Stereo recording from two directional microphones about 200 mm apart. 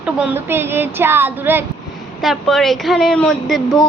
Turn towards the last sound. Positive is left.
turn(degrees=5)  # may be behind; listen again after turning